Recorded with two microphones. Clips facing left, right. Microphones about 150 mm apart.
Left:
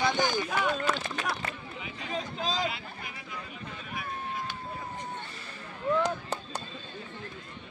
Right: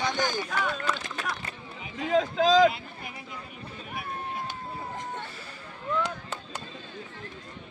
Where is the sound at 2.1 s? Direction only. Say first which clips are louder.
Right 12 dB; 90° right.